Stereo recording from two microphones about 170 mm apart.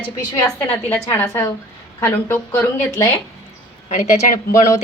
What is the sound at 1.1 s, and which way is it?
A woman's voice, 15° left (ahead or behind).